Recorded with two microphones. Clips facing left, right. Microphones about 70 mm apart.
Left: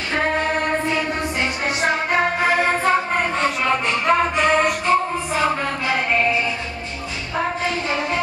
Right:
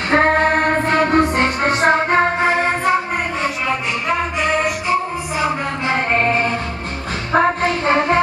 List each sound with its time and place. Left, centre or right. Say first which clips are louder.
0.1 s music: right 7 dB; right; by 3.0 s centre
3.4 s music: left 1 dB; centre
5.9 s music: right 3 dB; right